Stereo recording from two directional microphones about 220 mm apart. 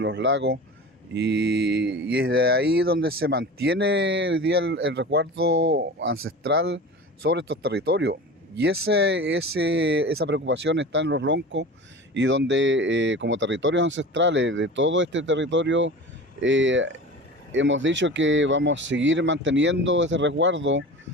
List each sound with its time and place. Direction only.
0.0 s speech: 55° right (ahead or behind)
6.4 s speech: 45° right (ahead or behind)
9.1 s speech: 50° right (ahead or behind)